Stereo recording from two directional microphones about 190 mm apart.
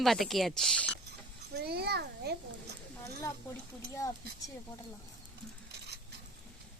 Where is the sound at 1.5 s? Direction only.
55° right (ahead or behind).